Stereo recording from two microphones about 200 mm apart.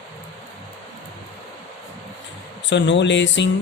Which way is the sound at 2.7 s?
65° left (ahead or behind).